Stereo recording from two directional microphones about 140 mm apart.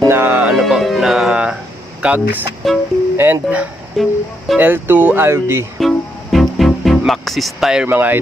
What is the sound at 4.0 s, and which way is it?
Speech, centre (ahead or behind).